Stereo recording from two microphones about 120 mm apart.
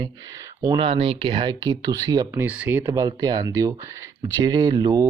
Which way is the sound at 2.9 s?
30° right (ahead or behind).